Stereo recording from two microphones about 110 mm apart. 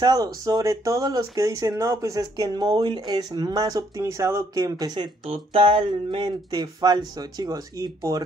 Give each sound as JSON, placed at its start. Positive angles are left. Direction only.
{"t": 0.0, "sound": "speech", "side_deg": -35}
{"t": 2.3, "sound": "speech", "side_deg": -40}
{"t": 5.2, "sound": "speech", "side_deg": -60}